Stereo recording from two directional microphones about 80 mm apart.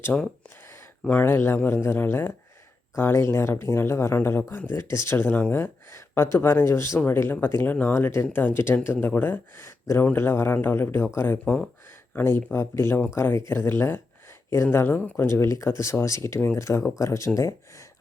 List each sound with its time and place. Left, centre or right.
0.1 s speech: centre
1.0 s speech: left
11.4 s speech: centre
12.1 s speech: left
15.3 s speech: left